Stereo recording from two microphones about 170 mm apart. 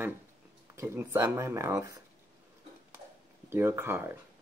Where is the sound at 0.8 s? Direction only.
15° right (ahead or behind).